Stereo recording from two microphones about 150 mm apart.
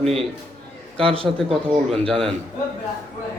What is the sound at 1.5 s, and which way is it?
Speech, 5° left (ahead or behind).